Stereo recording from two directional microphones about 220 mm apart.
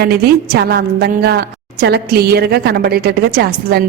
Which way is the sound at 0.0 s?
45° right (ahead or behind).